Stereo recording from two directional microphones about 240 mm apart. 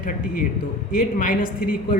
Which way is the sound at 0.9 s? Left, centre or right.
Left.